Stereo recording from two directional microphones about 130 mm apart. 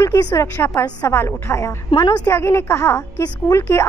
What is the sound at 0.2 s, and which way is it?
A woman's voice, 30° left (ahead or behind).